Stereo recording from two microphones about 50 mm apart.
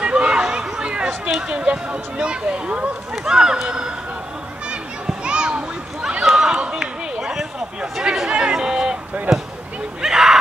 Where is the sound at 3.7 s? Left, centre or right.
Centre.